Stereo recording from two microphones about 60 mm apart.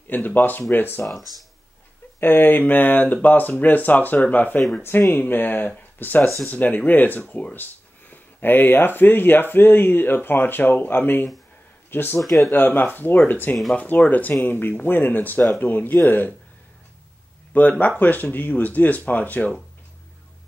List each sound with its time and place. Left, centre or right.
0.1 s speech: left
2.1 s speech: left
4.6 s speech: centre
5.1 s speech: left
17.6 s speech: left